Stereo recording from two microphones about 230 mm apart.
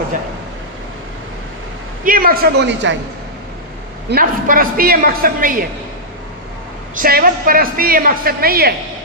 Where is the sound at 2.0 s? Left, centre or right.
Right.